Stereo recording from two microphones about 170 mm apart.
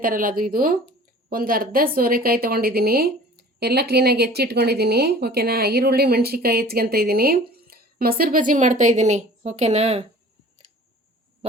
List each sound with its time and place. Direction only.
0.0 s a woman's voice: 55° right (ahead or behind); by 10.1 s 40° right (ahead or behind)